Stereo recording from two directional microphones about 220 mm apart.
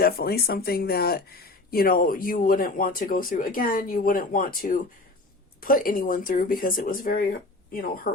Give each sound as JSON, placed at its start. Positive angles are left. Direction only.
{"t": 0.0, "sound": "speech", "side_deg": 45}